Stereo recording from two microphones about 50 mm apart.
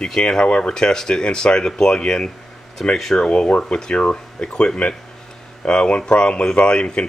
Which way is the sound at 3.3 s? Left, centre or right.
Left.